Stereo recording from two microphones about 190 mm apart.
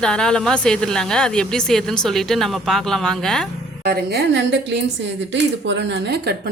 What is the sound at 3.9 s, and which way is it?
A woman's voice, 55° right (ahead or behind).